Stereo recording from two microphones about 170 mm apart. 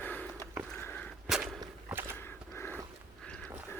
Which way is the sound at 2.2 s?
15° left (ahead or behind).